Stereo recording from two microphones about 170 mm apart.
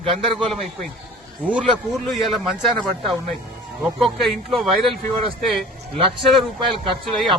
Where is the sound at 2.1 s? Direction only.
Centre (ahead or behind).